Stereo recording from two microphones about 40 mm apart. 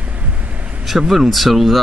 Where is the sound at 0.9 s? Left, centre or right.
Centre.